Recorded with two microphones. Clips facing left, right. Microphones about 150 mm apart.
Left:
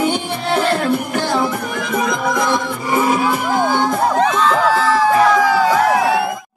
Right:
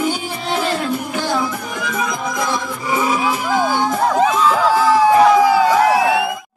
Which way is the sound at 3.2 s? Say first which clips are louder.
Left 1 dB; centre (ahead or behind).